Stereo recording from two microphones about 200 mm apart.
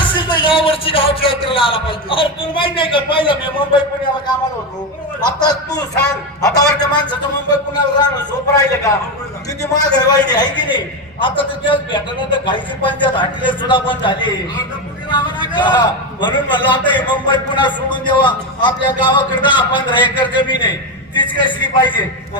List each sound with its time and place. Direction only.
0.0 s a man's voice: 25° left (ahead or behind)
5.2 s a man's voice: 20° left (ahead or behind)